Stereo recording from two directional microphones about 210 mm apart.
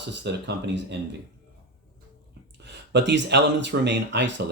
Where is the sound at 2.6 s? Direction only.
55° right (ahead or behind).